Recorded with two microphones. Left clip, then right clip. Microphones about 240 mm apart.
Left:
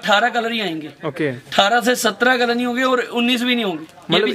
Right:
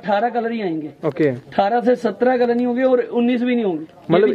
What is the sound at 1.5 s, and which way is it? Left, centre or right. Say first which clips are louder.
Speech: left 3 dB; left.